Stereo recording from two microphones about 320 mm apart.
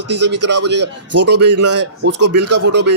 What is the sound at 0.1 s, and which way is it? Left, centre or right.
Speech, right.